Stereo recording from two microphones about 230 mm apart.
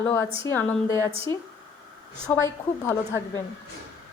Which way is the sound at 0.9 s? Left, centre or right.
Right.